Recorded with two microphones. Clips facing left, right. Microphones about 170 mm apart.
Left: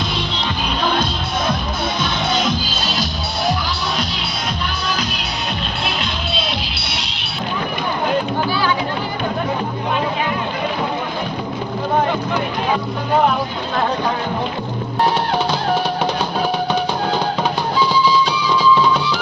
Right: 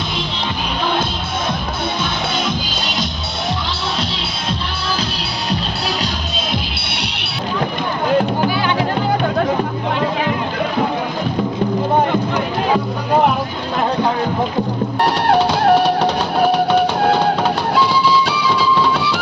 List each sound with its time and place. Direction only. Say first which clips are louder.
15.0 s drum: right 3 dB; 70° right (ahead or behind)
17.0 s music: right 4 dB; 70° right (ahead or behind)